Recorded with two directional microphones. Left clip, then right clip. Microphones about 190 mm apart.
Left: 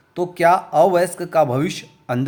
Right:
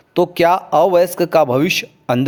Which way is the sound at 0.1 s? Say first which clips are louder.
Right 2 dB; 35° right (ahead or behind).